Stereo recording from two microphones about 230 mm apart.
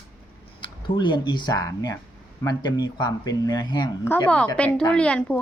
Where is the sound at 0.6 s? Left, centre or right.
Centre.